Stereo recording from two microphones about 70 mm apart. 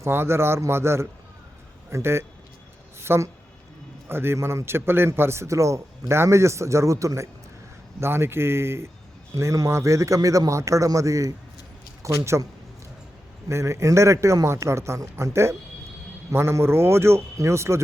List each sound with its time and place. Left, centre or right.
0.1 s a man's voice: right
8.0 s a man's voice: right
13.5 s a man's voice: right